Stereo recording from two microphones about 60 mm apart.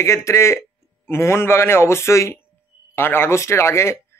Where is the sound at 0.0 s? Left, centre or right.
Left.